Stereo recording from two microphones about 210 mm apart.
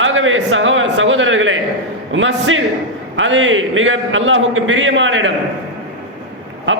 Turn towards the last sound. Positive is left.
turn(degrees=-65)  # may be behind; listen again after turning